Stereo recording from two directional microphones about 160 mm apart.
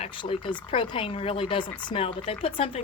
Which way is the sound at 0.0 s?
35° left (ahead or behind).